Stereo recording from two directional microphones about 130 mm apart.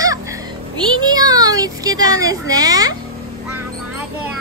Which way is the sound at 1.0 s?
30° right (ahead or behind).